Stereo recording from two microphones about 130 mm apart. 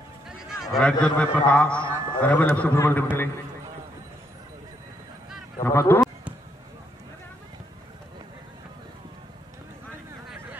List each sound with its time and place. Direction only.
0.3 s a man's voice: 5° right (ahead or behind); by 3.3 s 15° left (ahead or behind)
5.6 s a man's voice: 20° left (ahead or behind)